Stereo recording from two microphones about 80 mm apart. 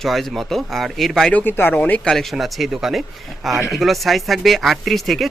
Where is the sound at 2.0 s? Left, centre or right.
Centre.